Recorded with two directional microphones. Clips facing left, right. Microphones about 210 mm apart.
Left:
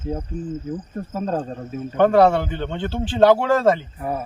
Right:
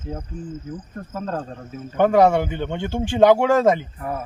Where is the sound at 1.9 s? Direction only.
10° right (ahead or behind).